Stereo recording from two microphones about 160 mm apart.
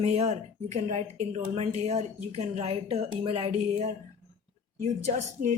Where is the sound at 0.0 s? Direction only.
45° right (ahead or behind).